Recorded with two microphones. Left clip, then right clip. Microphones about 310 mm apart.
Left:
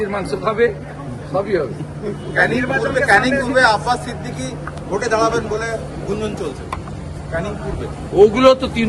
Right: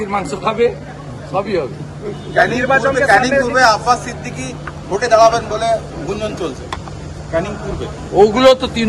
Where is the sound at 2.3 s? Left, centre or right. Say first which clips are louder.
Right 4 dB; right.